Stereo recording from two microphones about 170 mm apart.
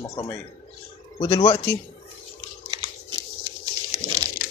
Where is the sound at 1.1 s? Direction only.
40° left (ahead or behind).